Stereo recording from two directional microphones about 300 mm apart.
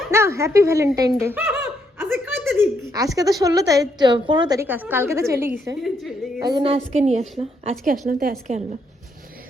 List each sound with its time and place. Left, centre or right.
0.0 s a sound: centre
3.2 s a woman's voice: centre
6.4 s a woman's voice: centre